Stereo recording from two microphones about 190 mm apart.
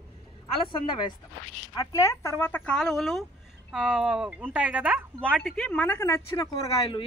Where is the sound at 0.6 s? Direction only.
25° left (ahead or behind); by 5.4 s 5° right (ahead or behind).